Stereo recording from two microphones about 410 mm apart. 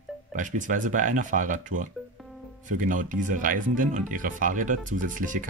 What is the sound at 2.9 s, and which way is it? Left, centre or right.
Speech, centre.